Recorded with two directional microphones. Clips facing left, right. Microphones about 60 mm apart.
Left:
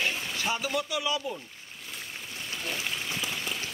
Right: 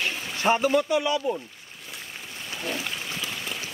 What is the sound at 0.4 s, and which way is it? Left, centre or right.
Speech, right.